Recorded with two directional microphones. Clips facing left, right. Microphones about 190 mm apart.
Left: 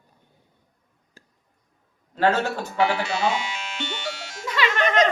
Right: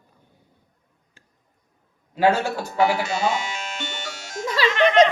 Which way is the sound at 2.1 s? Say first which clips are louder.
Right 2 dB; 10° right (ahead or behind).